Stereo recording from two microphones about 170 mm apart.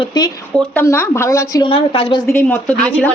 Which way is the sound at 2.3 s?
15° left (ahead or behind).